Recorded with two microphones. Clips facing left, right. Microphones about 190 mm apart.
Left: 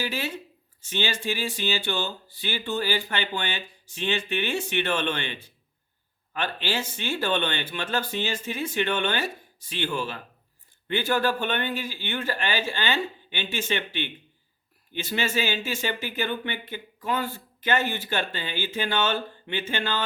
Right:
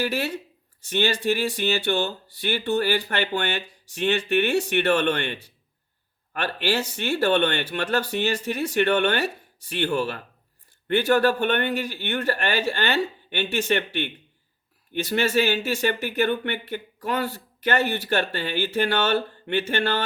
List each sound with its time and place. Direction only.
0.0 s speech: 65° right (ahead or behind)